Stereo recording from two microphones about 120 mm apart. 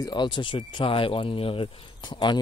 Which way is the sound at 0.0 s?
40° left (ahead or behind).